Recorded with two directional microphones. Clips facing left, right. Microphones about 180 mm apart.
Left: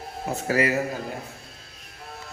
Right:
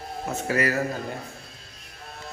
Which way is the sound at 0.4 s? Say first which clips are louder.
Left 2 dB; 25° left (ahead or behind).